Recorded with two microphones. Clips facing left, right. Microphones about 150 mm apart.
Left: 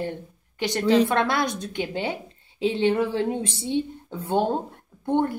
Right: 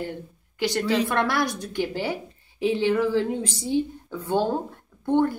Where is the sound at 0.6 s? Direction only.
20° left (ahead or behind).